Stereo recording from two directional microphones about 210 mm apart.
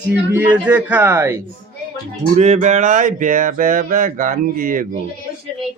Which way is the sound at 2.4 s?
35° right (ahead or behind).